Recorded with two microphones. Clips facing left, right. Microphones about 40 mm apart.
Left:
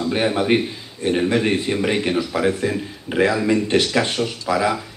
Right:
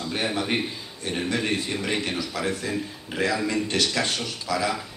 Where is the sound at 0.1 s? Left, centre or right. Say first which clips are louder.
Left 7 dB; left.